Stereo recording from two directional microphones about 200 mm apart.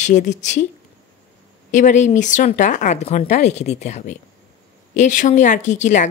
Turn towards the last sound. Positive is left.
turn(degrees=35)  # may be behind; listen again after turning